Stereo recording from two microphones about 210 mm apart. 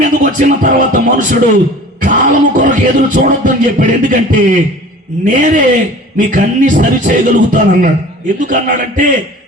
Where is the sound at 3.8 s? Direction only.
40° right (ahead or behind).